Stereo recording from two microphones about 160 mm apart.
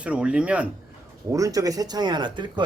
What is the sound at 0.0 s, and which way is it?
Speech, 5° right (ahead or behind).